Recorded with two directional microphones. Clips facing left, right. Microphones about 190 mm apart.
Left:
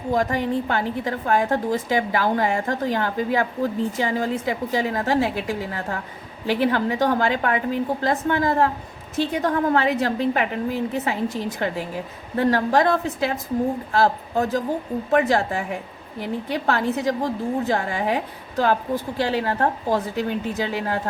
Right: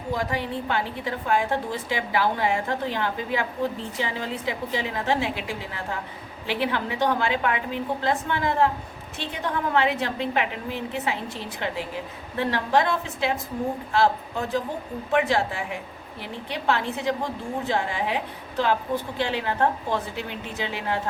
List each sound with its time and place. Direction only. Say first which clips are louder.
0.1 s a woman's voice: left 6 dB; 45° left (ahead or behind)